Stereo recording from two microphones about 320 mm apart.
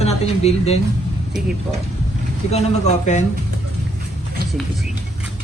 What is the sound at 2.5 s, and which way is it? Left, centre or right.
Speech, left.